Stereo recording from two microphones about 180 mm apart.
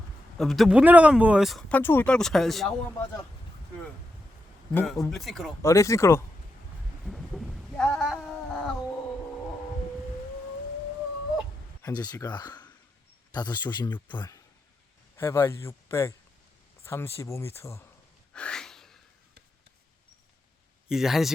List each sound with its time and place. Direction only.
0.3 s speech: centre (ahead or behind)
1.8 s speech: 10° left (ahead or behind)
4.7 s speech: 10° left (ahead or behind)
5.1 s speech: centre (ahead or behind)
5.6 s speech: 15° left (ahead or behind)
7.0 s a sound: centre (ahead or behind)
11.9 s a man's voice: 20° left (ahead or behind)
18.3 s gasp: 5° left (ahead or behind)
20.8 s speech: centre (ahead or behind)